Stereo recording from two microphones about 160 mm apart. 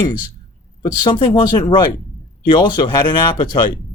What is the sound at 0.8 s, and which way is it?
Speech, 25° left (ahead or behind).